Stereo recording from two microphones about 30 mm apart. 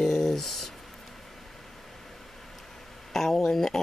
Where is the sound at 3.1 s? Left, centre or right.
Centre.